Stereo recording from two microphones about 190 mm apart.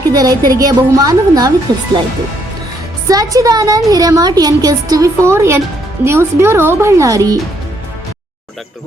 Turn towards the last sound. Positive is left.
turn(degrees=-20)  # may be behind; listen again after turning